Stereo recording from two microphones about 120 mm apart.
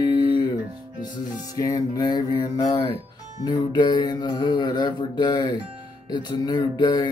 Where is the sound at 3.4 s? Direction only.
40° left (ahead or behind).